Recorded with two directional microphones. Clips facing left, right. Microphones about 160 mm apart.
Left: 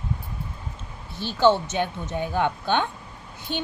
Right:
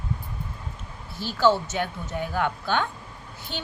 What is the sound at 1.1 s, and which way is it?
A woman's voice, 20° left (ahead or behind).